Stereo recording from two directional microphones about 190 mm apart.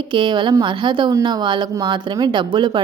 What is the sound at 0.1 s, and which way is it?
A woman's voice, 25° right (ahead or behind).